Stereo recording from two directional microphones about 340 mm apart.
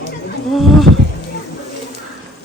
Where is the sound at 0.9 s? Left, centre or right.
Right.